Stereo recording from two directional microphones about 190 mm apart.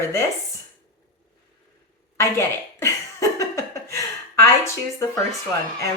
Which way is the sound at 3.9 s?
15° left (ahead or behind).